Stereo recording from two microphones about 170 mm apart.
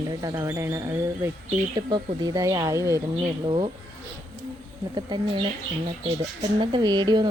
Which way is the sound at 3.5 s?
30° right (ahead or behind).